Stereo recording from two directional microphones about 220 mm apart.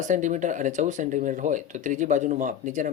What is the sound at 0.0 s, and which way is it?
Speech, 35° right (ahead or behind).